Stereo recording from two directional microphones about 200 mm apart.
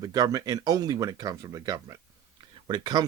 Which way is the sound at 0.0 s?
20° right (ahead or behind).